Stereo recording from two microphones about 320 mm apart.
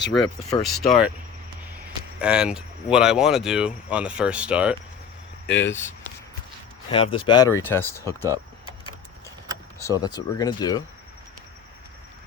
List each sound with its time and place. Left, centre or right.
0.6 s speech: centre
2.1 s speech: centre
5.5 s speech: centre
6.9 s speech: centre
9.8 s speech: centre